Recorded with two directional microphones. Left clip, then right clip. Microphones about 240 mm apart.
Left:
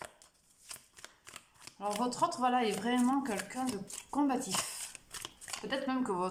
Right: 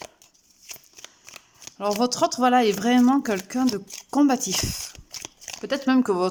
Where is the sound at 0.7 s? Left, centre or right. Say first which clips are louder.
Right 8 dB; centre.